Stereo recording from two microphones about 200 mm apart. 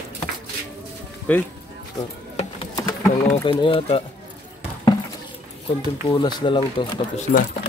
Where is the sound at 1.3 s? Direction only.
10° left (ahead or behind).